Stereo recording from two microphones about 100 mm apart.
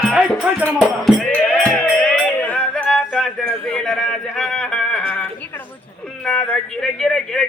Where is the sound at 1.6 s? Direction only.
15° left (ahead or behind).